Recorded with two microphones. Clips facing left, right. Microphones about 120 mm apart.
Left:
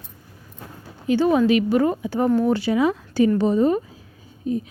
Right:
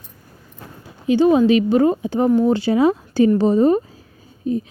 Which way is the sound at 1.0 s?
20° right (ahead or behind).